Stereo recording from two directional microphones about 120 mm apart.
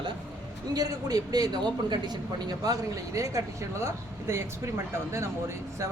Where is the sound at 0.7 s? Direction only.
30° right (ahead or behind).